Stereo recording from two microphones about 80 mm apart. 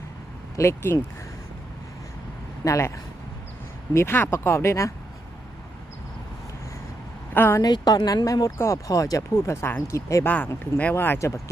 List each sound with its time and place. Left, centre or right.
0.5 s speech: left
2.6 s speech: left
3.9 s speech: left
7.3 s speech: left
7.6 s speech: left
8.5 s speech: left
8.9 s speech: left
9.6 s speech: left
10.2 s speech: left